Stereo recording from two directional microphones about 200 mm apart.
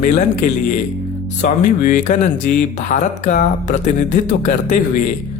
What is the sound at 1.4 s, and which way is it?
Speech, 40° left (ahead or behind).